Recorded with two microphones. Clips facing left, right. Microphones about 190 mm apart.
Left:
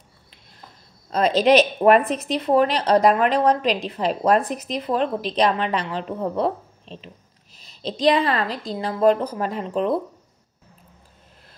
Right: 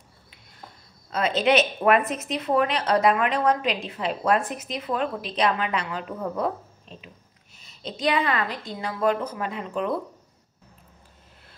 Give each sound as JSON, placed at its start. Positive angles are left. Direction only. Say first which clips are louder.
{"t": 1.1, "sound": "a woman's voice", "louder": "left 5 dB", "side_deg": 35}